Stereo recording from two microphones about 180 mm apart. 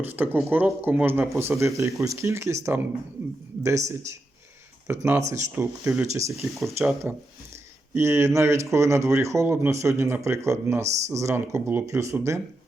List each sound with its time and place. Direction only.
0.0 s speech: 10° right (ahead or behind)